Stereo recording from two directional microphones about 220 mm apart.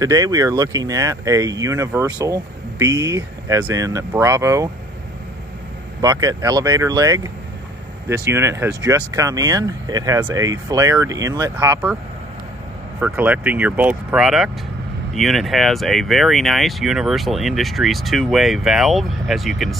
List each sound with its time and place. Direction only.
0.0 s speech: 15° right (ahead or behind)
5.9 s speech: 15° right (ahead or behind)
13.0 s speech: 5° right (ahead or behind)